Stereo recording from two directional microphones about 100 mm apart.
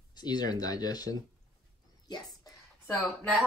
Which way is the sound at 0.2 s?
45° left (ahead or behind).